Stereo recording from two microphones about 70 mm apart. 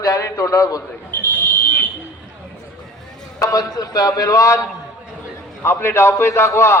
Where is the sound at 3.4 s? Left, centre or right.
Left.